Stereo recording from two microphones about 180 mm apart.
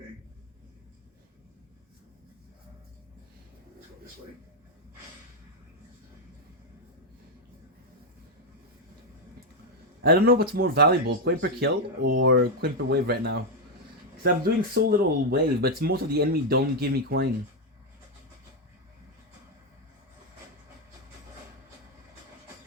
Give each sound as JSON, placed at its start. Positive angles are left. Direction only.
{"t": 10.0, "sound": "speech", "side_deg": -60}
{"t": 14.4, "sound": "speech", "side_deg": -55}